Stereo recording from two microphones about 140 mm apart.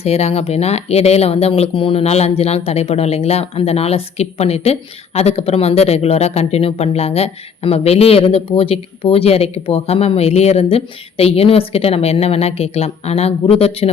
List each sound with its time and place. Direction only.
0.0 s speech: 50° left (ahead or behind)